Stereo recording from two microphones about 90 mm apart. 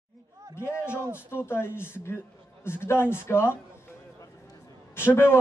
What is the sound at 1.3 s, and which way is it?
A man's voice, 25° left (ahead or behind).